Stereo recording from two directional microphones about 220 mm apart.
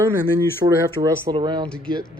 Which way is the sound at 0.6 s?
20° right (ahead or behind).